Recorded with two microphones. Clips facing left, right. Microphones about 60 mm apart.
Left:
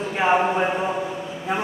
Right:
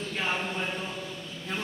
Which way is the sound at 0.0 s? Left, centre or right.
Left.